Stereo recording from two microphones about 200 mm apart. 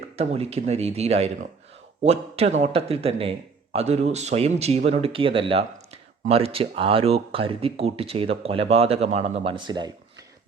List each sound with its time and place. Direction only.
0.2 s a man's voice: 30° right (ahead or behind)